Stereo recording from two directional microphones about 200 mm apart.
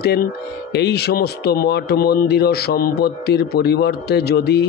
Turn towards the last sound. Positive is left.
turn(degrees=55)  # may be behind; listen again after turning